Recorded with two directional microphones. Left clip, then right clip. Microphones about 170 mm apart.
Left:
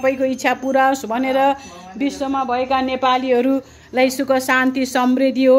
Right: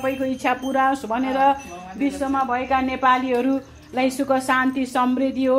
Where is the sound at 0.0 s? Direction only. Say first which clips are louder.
Left 5 dB; 55° left (ahead or behind).